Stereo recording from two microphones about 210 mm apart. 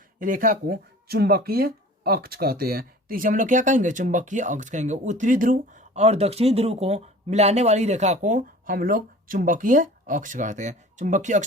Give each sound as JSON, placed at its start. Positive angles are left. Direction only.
{"t": 0.2, "sound": "speech", "side_deg": -40}